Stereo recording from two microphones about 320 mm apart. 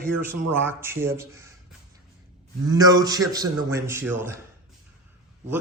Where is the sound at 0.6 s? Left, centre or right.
Centre.